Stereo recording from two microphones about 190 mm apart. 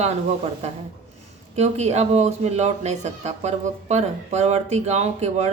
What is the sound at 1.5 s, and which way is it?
Speech, 35° right (ahead or behind).